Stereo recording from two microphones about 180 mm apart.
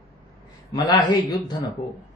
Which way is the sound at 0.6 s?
20° left (ahead or behind).